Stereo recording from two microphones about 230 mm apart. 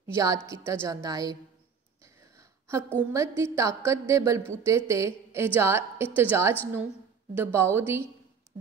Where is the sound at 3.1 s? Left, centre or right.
Centre.